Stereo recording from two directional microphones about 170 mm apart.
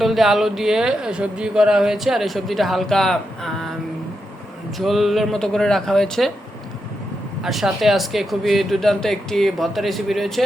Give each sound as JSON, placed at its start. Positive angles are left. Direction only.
{"t": 0.0, "sound": "speech", "side_deg": 0}
{"t": 4.8, "sound": "speech", "side_deg": 0}
{"t": 7.4, "sound": "speech", "side_deg": 0}